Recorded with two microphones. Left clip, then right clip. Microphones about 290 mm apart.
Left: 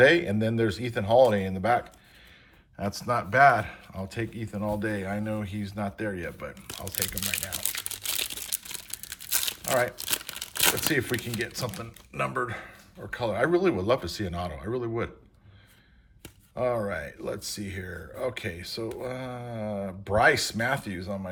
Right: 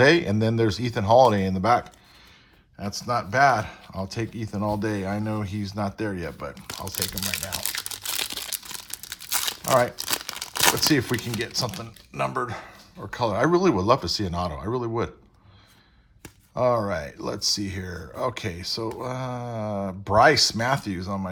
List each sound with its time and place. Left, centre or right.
0.0 s speech: centre
2.7 s speech: centre
16.6 s speech: centre